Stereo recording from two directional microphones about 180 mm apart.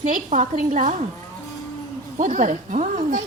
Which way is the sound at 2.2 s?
45° right (ahead or behind).